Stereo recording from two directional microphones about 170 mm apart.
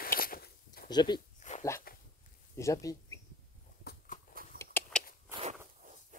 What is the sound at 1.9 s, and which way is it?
Dog, 60° left (ahead or behind).